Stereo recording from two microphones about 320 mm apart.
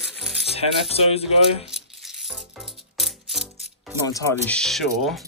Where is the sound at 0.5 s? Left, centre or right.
Centre.